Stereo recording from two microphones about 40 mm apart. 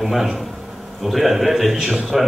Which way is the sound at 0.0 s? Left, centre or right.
Centre.